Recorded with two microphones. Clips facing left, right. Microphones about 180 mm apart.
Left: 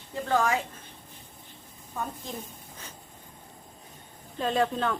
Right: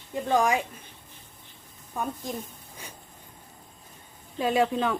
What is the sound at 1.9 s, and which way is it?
Speech, 15° right (ahead or behind).